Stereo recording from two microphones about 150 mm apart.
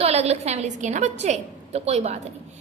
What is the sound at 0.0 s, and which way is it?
A woman's voice, 45° right (ahead or behind).